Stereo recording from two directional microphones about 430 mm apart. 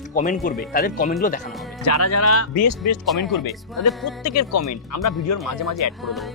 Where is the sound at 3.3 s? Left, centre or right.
Left.